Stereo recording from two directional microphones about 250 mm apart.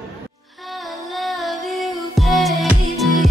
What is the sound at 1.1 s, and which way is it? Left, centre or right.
Music, centre.